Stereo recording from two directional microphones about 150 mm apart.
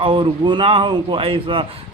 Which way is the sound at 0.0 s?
35° right (ahead or behind).